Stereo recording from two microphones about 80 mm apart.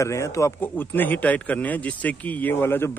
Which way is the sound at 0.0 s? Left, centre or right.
Left.